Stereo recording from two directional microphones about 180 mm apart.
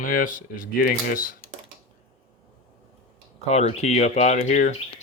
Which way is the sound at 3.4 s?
35° left (ahead or behind).